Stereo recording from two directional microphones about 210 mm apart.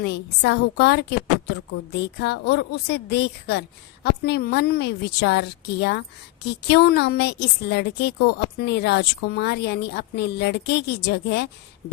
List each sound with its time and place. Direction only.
0.0 s a woman's voice: 50° left (ahead or behind)